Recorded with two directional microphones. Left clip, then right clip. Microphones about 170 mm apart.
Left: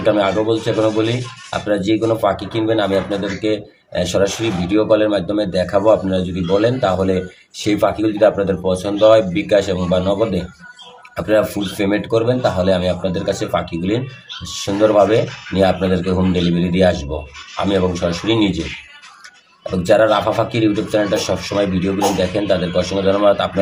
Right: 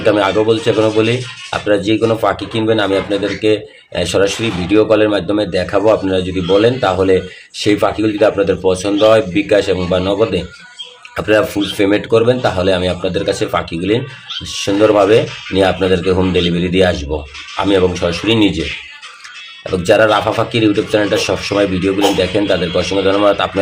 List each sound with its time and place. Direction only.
0.0 s speech: 35° right (ahead or behind)
19.9 s speech: 35° right (ahead or behind)